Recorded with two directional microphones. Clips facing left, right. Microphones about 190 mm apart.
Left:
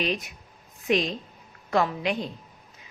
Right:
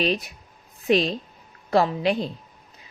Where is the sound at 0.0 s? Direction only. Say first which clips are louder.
Right 4 dB; 35° right (ahead or behind).